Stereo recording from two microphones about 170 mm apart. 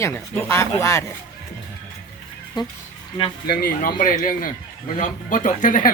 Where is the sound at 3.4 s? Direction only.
60° left (ahead or behind).